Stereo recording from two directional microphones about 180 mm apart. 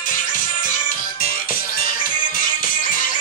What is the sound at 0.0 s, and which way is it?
Music, 50° left (ahead or behind).